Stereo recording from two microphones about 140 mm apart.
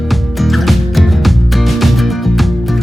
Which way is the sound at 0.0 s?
Centre (ahead or behind).